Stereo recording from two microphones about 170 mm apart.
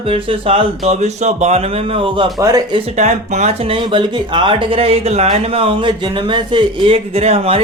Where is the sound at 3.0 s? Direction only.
40° right (ahead or behind).